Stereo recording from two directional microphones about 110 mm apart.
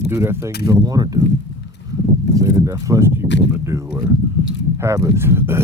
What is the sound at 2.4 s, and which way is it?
Speech, 30° right (ahead or behind).